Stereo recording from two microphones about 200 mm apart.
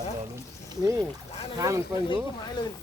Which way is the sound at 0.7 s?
15° right (ahead or behind).